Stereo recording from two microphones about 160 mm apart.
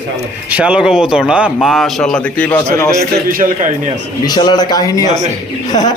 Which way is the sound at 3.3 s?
60° right (ahead or behind).